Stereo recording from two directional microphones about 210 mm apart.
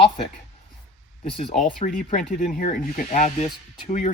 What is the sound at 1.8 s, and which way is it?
Speech, 35° left (ahead or behind).